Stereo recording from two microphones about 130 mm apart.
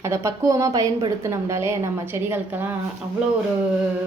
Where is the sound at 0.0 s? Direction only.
25° right (ahead or behind).